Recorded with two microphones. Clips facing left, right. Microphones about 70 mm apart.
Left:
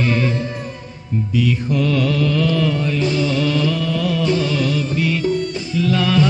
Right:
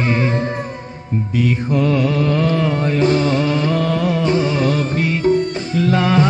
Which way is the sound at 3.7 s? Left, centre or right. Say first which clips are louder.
Right 3 dB; right.